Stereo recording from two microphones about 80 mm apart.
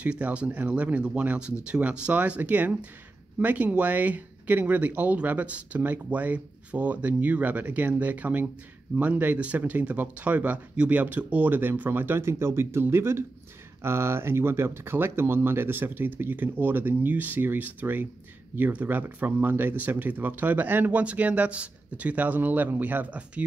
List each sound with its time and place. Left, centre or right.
0.0 s speech: centre